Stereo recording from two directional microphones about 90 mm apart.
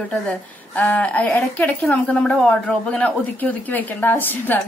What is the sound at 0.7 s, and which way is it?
A woman's voice, 15° left (ahead or behind).